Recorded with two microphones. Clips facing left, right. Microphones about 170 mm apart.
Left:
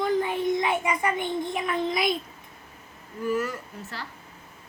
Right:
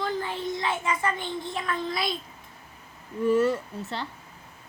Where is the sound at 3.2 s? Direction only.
30° right (ahead or behind).